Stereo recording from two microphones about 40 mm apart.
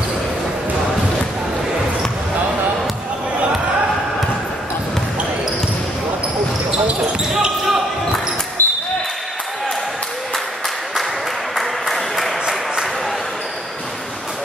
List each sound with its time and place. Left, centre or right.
8.6 s basketball bounce: left
11.5 s applause: centre